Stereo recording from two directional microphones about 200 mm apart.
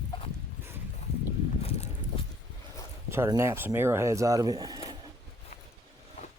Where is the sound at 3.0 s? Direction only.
10° right (ahead or behind).